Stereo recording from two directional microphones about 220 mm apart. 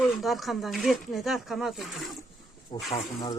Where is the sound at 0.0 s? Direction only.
Centre (ahead or behind).